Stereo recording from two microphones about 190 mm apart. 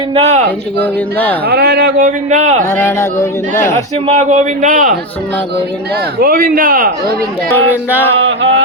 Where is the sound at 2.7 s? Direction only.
15° left (ahead or behind).